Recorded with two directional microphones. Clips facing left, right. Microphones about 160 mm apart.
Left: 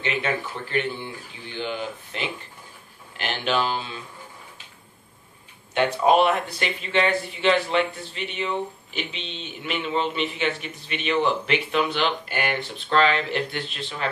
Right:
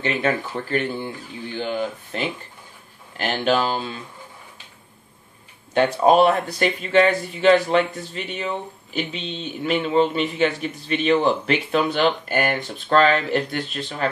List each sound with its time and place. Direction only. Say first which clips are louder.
0.0 s a man's voice: right 4 dB; 40° right (ahead or behind)
5.8 s a man's voice: right 3 dB; 40° right (ahead or behind)